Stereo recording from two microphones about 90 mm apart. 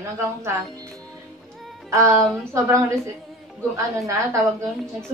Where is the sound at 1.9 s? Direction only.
35° right (ahead or behind).